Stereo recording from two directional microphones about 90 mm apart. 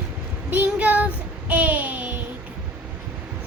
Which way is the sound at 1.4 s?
15° right (ahead or behind).